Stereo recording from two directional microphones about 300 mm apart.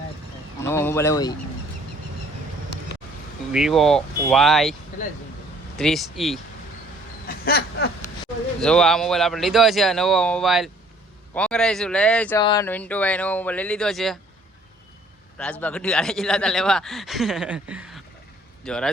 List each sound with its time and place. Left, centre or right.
0.6 s speech: centre
3.5 s speech: centre
5.7 s speech: centre
7.3 s a sound: left
8.6 s speech: centre
15.4 s speech: centre